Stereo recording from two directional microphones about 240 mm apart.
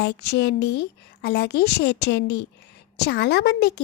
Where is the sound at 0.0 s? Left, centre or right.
Left.